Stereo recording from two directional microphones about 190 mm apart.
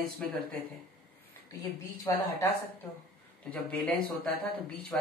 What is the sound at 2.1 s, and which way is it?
Speech, 15° left (ahead or behind).